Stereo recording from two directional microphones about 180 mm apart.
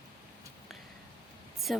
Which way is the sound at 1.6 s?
Centre (ahead or behind).